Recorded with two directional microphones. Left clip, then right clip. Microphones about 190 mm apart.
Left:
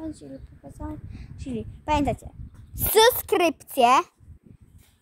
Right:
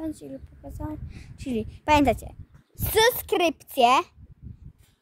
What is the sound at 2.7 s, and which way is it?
Speech, 45° left (ahead or behind).